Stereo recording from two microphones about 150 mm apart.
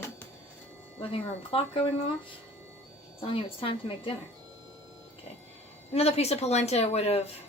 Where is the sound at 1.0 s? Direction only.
40° left (ahead or behind).